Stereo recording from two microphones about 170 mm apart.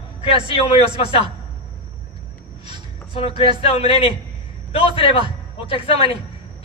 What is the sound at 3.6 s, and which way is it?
A man's voice, 35° left (ahead or behind).